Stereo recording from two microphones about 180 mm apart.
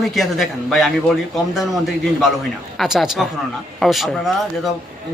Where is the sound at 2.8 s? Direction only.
Centre (ahead or behind).